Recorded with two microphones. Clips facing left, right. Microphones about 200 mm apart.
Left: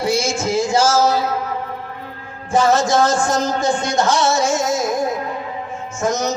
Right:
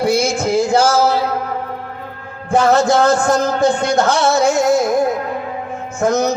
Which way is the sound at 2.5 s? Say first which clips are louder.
Right 3 dB; 60° right (ahead or behind).